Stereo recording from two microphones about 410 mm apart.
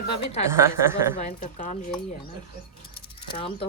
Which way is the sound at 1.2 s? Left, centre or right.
Centre.